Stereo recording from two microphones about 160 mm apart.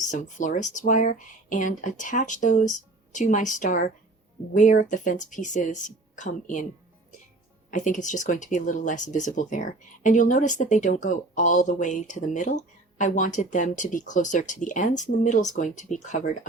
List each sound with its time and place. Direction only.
0.1 s speech: 50° left (ahead or behind)
7.7 s speech: 50° left (ahead or behind)